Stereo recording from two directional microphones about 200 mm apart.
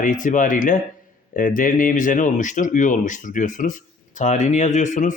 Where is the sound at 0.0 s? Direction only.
40° left (ahead or behind).